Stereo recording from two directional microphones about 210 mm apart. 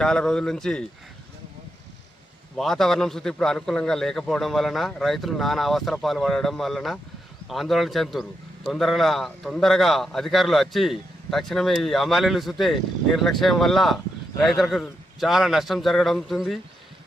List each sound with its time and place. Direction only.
0.0 s a man's voice: 5° left (ahead or behind)
2.6 s a man's voice: centre (ahead or behind)